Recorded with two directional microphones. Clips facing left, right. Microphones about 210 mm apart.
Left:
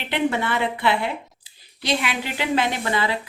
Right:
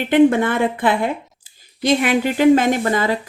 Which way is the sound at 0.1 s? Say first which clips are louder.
Right 9 dB; 50° right (ahead or behind).